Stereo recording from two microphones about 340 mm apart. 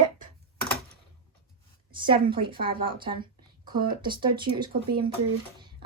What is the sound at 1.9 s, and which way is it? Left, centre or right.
Speech, centre.